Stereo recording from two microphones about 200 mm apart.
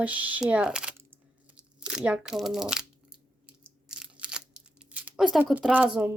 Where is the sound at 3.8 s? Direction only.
5° right (ahead or behind).